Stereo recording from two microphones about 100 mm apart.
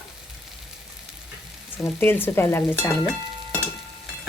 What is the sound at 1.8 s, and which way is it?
Speech, 25° left (ahead or behind).